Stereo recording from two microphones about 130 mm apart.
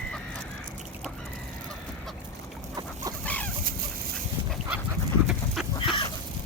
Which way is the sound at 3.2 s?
10° left (ahead or behind).